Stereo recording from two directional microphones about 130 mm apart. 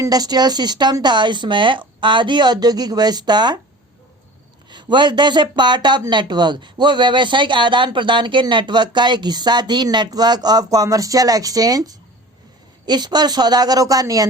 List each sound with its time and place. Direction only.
0.0 s speech: 30° right (ahead or behind)
4.7 s speech: 35° right (ahead or behind)